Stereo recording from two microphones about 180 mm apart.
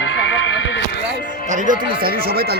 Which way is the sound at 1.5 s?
50° right (ahead or behind).